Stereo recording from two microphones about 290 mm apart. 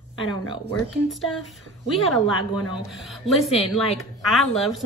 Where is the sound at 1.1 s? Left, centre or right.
Centre.